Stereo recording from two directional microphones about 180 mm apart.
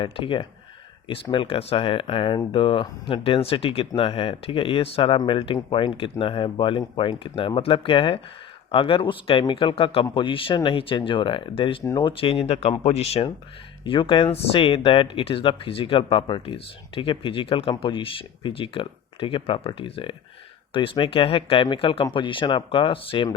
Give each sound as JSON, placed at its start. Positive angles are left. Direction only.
{"t": 0.0, "sound": "speech", "side_deg": 30}